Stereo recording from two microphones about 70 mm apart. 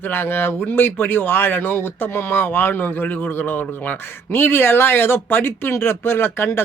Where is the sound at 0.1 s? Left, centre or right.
Left.